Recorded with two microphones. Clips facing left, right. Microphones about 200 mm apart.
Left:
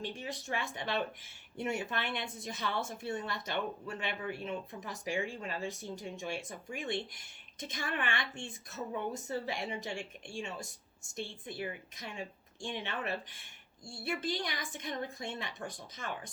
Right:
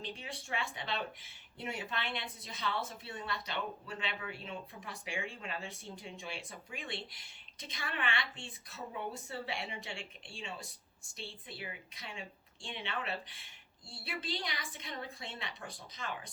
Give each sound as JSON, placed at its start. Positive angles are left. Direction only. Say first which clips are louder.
{"t": 0.1, "sound": "speech", "louder": "left 3 dB", "side_deg": 45}
{"t": 9.6, "sound": "speech", "louder": "left 6 dB", "side_deg": 30}
{"t": 10.2, "sound": "speech", "louder": "left 4 dB", "side_deg": 50}